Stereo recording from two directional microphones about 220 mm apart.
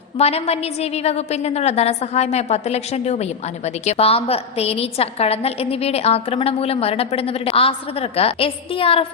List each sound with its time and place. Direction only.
0.2 s a woman's voice: 30° left (ahead or behind)